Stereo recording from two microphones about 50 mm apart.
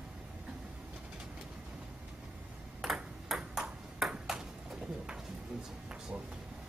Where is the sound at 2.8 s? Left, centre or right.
Centre.